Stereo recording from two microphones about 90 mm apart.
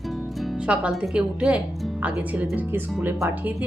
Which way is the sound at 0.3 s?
Centre (ahead or behind).